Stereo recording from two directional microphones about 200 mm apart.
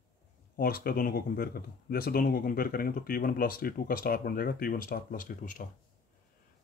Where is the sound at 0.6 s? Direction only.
50° left (ahead or behind).